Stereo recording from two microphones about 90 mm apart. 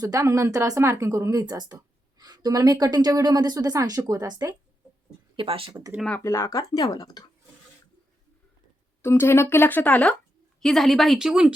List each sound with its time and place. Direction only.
0.0 s speech: 35° right (ahead or behind)
5.4 s speech: 90° right
6.1 s speech: 30° left (ahead or behind); by 7.3 s 50° left (ahead or behind)
9.0 s speech: 30° left (ahead or behind)
10.6 s speech: 5° left (ahead or behind)